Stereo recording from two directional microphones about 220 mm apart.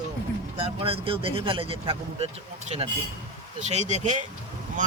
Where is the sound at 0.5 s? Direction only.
25° right (ahead or behind).